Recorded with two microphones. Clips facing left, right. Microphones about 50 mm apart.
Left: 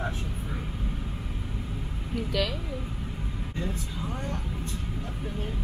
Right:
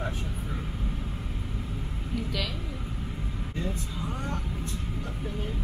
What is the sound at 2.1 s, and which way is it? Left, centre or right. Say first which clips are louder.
Speech: left 4 dB; centre.